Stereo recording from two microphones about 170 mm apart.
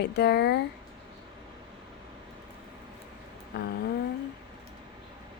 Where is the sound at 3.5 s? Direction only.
65° left (ahead or behind).